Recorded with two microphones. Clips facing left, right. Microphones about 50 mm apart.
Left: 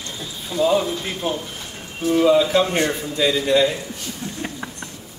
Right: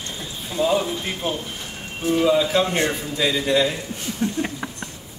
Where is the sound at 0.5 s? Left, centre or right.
Right.